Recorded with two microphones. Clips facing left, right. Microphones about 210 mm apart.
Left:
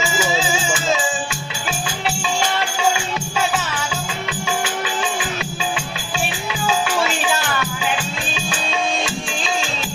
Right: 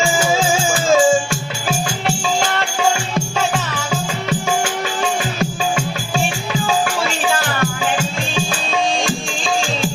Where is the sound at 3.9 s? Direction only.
45° right (ahead or behind).